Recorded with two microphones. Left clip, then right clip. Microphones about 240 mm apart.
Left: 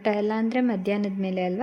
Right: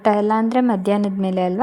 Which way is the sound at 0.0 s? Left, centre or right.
Centre.